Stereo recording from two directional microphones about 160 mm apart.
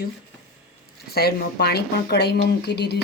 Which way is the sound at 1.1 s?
75° left (ahead or behind).